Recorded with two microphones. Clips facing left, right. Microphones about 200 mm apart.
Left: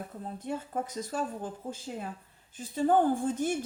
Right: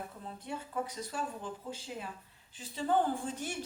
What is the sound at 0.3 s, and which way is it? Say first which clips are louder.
A woman's voice: left 4 dB; 45° left (ahead or behind).